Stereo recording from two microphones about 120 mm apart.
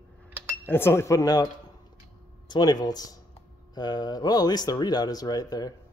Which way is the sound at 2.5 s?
35° left (ahead or behind).